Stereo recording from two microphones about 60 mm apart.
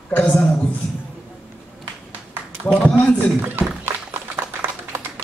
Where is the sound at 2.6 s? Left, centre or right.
Left.